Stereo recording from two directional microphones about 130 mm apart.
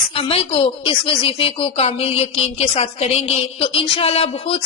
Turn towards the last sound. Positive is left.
turn(degrees=50)  # may be behind; listen again after turning